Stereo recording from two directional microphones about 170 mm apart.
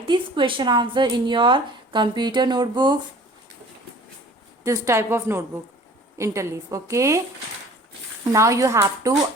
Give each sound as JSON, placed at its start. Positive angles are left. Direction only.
{"t": 0.0, "sound": "speech", "side_deg": -30}
{"t": 4.6, "sound": "a woman's voice", "side_deg": -15}
{"t": 8.2, "sound": "speech", "side_deg": -20}